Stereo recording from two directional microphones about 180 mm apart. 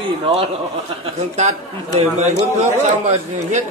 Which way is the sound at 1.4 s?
40° right (ahead or behind).